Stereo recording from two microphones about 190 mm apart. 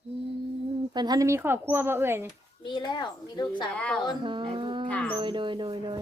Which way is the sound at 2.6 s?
25° left (ahead or behind).